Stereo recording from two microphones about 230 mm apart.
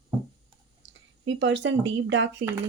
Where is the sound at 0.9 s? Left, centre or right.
Right.